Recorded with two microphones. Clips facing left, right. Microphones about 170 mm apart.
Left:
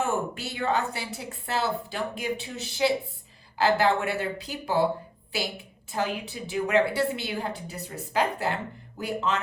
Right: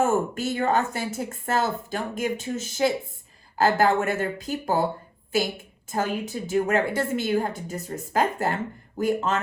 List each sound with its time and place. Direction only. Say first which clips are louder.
0.0 s speech: right 5 dB; 40° right (ahead or behind)
6.2 s speech: right 5 dB; 40° right (ahead or behind)